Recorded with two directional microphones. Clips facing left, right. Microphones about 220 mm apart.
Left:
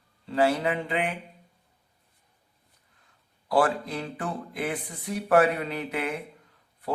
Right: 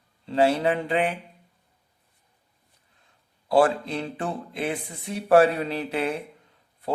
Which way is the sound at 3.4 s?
25° right (ahead or behind).